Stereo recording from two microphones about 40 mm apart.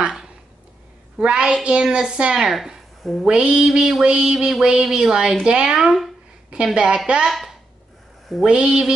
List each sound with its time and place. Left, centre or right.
1.2 s a woman's voice: right
2.4 s a woman's voice: centre
3.0 s speech: centre
3.3 s a woman's voice: right
7.2 s speech: centre
8.5 s a woman's voice: right